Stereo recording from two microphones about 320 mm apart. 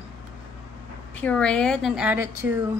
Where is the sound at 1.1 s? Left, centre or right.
Centre.